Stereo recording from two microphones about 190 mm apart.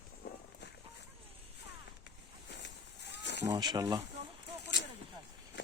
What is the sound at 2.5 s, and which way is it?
Livestock, 65° left (ahead or behind).